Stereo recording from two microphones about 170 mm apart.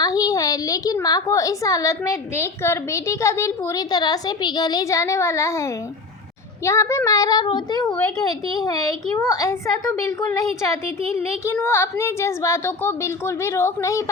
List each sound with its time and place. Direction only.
0.0 s a child's voice: 20° left (ahead or behind)